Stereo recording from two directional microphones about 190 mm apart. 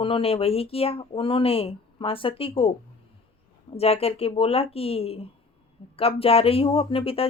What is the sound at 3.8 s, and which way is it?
Speech, 30° left (ahead or behind).